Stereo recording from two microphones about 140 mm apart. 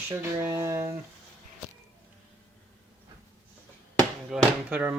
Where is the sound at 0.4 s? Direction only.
20° right (ahead or behind).